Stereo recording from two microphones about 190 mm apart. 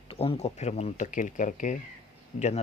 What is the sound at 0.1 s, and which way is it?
Speech, 30° left (ahead or behind).